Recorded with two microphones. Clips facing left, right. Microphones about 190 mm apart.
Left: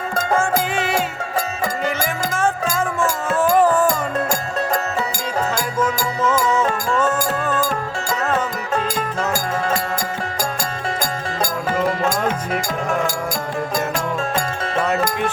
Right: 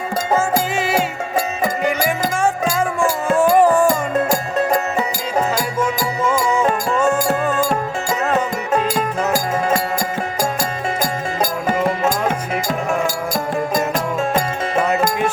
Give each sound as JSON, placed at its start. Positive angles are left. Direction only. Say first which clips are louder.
{"t": 0.3, "sound": "music", "louder": "right 1 dB", "side_deg": -5}
{"t": 5.8, "sound": "music", "louder": "left 1 dB", "side_deg": -10}
{"t": 14.2, "sound": "music", "louder": "right 4 dB", "side_deg": -15}